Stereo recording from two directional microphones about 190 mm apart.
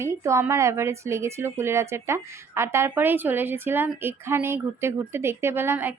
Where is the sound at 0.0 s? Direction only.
15° right (ahead or behind).